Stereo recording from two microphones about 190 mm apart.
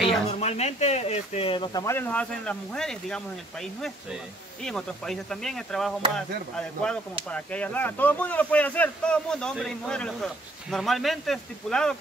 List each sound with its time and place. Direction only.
0.3 s speech: 35° left (ahead or behind); by 12.0 s 5° left (ahead or behind)